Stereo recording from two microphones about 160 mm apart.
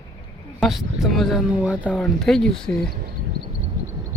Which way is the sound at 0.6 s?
Centre (ahead or behind).